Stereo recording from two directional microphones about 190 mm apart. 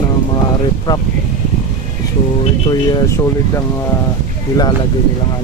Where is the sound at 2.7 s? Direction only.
20° left (ahead or behind).